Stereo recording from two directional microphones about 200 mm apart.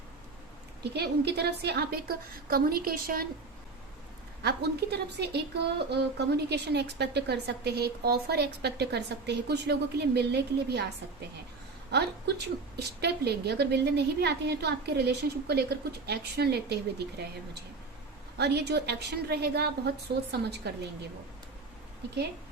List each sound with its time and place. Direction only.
0.8 s a woman's voice: 55° right (ahead or behind)
4.4 s a woman's voice: 55° right (ahead or behind)